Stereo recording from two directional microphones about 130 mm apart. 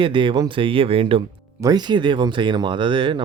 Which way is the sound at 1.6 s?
30° right (ahead or behind).